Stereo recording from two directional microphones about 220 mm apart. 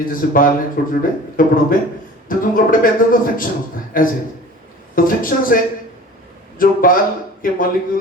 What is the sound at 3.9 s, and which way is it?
Speech, 40° left (ahead or behind).